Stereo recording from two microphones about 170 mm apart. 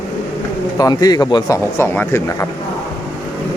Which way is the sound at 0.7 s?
20° left (ahead or behind).